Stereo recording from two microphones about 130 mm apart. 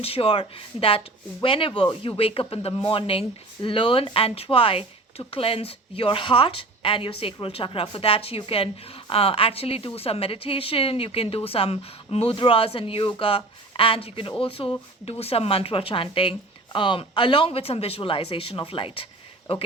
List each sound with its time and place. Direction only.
0.0 s a woman's voice: 45° left (ahead or behind)